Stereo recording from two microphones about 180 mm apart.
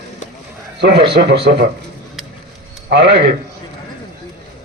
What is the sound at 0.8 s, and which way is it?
Speech, 65° right (ahead or behind).